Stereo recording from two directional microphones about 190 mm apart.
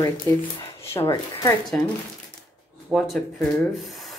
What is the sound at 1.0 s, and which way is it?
Speech, 20° left (ahead or behind).